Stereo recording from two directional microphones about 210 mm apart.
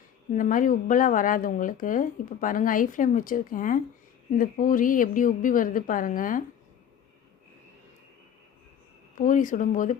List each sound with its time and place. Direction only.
0.3 s speech: 40° left (ahead or behind)
9.1 s speech: 40° left (ahead or behind)